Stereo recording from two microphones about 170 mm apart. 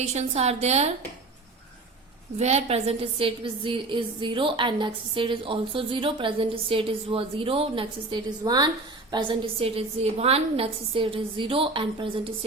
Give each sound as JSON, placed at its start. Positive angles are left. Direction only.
{"t": 0.0, "sound": "a woman's voice", "side_deg": -40}
{"t": 2.4, "sound": "a woman's voice", "side_deg": -40}